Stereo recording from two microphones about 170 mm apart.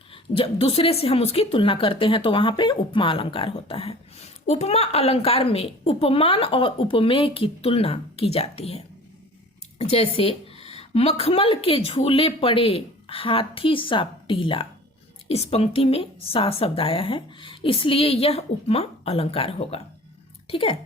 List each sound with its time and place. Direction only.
0.1 s a woman's voice: 35° left (ahead or behind)